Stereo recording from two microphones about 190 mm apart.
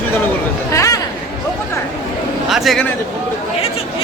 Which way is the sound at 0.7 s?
15° left (ahead or behind).